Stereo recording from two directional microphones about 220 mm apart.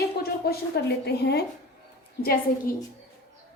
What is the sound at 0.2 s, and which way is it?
A woman's voice, 45° left (ahead or behind).